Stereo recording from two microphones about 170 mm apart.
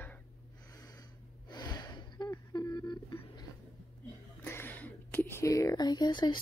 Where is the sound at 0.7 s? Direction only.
25° left (ahead or behind).